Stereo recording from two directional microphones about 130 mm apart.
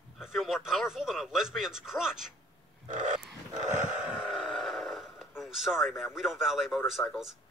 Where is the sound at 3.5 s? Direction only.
70° right (ahead or behind).